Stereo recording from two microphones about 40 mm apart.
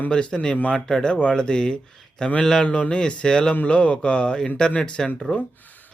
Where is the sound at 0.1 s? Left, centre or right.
Left.